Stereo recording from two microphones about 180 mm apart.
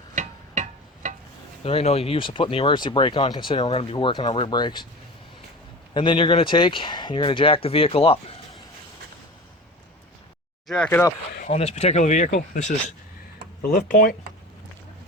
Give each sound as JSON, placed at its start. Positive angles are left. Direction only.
{"t": 0.2, "sound": "music", "side_deg": -45}
{"t": 1.6, "sound": "speech", "side_deg": 35}
{"t": 5.9, "sound": "speech", "side_deg": 25}
{"t": 10.7, "sound": "speech", "side_deg": 10}
{"t": 11.3, "sound": "speech", "side_deg": 40}
{"t": 13.6, "sound": "speech", "side_deg": 50}